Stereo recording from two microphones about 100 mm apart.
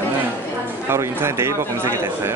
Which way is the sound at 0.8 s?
25° right (ahead or behind).